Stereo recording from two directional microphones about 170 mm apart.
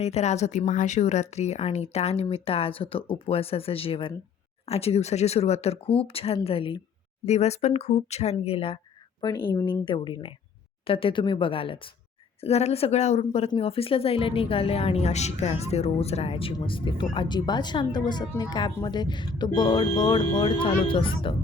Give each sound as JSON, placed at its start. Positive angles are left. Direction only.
{"t": 0.0, "sound": "speech", "side_deg": 40}